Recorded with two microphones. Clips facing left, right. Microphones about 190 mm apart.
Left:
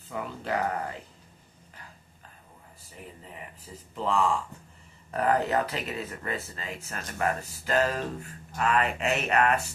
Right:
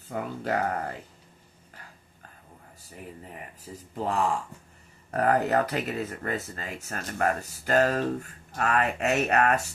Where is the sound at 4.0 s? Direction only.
45° right (ahead or behind).